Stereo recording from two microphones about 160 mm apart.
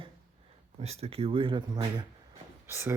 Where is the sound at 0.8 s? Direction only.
40° right (ahead or behind).